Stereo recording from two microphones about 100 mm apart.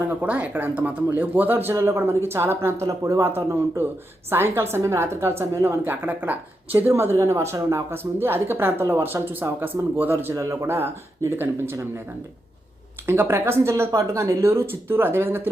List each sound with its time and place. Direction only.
0.0 s speech: 15° right (ahead or behind)
13.1 s speech: 25° right (ahead or behind)